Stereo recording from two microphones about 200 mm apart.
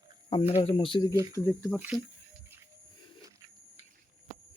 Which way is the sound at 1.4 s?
10° left (ahead or behind).